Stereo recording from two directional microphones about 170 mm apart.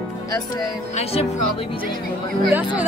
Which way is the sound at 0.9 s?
40° left (ahead or behind).